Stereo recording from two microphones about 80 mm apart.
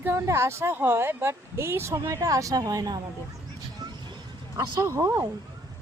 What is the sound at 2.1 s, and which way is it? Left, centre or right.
Speech, right.